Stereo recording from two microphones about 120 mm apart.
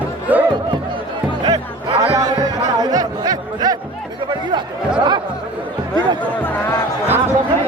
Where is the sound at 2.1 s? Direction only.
30° right (ahead or behind).